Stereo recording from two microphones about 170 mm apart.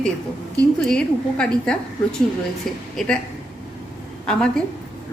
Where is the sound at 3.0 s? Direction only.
Centre (ahead or behind).